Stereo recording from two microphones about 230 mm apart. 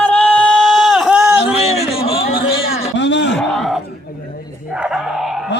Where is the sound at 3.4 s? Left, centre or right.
Centre.